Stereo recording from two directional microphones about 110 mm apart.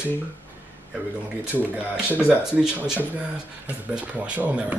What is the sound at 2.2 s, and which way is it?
Speech, 10° right (ahead or behind).